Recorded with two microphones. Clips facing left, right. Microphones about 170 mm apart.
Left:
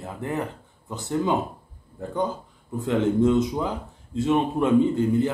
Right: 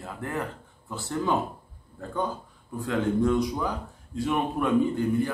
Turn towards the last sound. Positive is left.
turn(degrees=20)  # may be behind; listen again after turning